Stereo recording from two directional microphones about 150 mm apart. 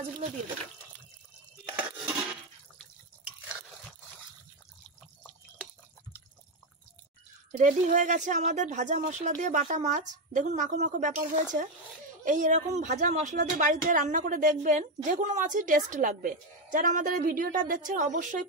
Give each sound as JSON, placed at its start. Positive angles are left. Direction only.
{"t": 7.5, "sound": "a woman's voice", "side_deg": -55}